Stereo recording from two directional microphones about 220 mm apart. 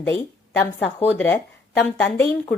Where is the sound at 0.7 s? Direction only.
10° left (ahead or behind).